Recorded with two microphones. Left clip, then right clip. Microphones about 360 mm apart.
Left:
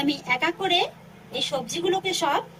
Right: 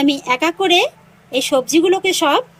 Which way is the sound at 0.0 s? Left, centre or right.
Centre.